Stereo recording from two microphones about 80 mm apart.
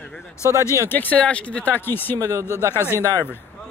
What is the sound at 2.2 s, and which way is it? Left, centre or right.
Speech, right.